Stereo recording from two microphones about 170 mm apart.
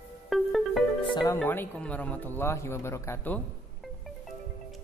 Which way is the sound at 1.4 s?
10° left (ahead or behind).